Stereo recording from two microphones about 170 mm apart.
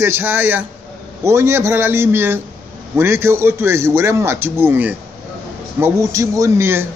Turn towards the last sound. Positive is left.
turn(degrees=-15)  # may be behind; listen again after turning